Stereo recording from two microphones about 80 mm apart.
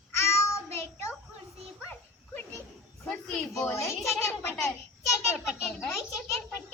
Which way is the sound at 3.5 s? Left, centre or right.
Left.